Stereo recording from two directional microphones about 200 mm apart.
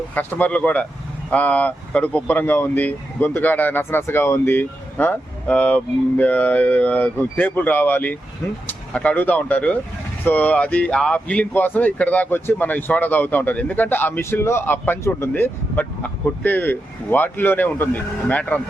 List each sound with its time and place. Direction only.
0.1 s speech: 10° left (ahead or behind)